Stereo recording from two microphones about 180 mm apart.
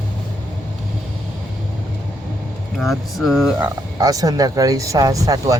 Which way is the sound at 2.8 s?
Centre (ahead or behind).